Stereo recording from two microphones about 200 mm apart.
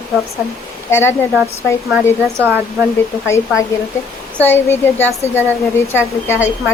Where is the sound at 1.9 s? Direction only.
10° right (ahead or behind).